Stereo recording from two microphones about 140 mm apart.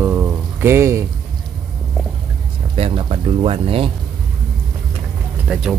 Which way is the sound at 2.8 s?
40° right (ahead or behind).